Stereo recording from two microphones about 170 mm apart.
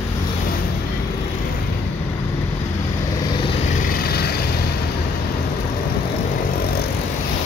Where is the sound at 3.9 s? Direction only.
65° left (ahead or behind).